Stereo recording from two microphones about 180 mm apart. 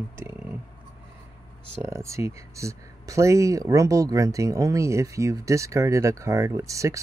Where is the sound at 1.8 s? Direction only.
15° right (ahead or behind).